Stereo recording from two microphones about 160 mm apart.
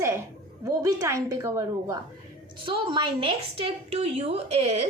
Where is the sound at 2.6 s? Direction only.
30° right (ahead or behind).